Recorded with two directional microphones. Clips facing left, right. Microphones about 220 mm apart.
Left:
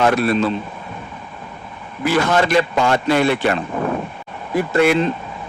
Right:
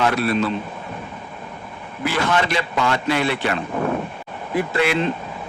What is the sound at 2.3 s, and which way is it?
A man's voice, 45° left (ahead or behind).